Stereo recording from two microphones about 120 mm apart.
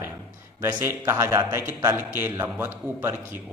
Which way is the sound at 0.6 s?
20° right (ahead or behind).